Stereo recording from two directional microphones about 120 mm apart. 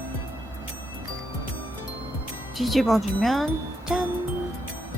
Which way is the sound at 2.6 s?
Centre (ahead or behind).